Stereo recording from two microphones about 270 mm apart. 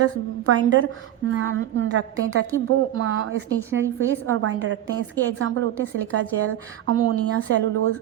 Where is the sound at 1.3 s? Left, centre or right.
Right.